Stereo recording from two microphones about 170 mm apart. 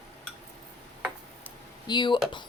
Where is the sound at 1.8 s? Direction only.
25° left (ahead or behind).